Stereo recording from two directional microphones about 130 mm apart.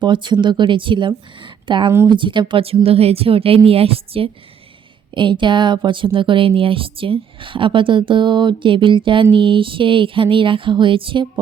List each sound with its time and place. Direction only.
0.0 s a woman's voice: 35° right (ahead or behind)